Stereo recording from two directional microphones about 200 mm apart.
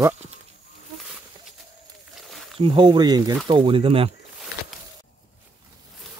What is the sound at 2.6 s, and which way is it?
Speech, 25° right (ahead or behind).